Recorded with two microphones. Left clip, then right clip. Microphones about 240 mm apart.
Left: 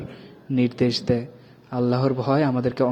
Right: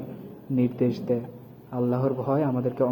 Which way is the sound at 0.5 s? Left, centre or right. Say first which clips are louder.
Left 3 dB; left.